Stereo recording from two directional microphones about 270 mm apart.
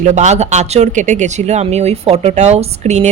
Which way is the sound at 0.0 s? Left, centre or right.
Right.